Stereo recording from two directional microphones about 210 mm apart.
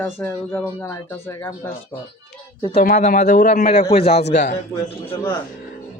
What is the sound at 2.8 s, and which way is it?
A man's voice, 40° left (ahead or behind).